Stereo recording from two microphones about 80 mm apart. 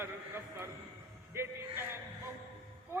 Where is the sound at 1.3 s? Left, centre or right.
Right.